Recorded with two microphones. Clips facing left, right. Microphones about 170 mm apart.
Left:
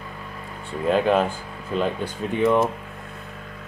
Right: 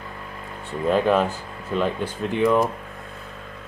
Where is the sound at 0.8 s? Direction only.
Centre (ahead or behind).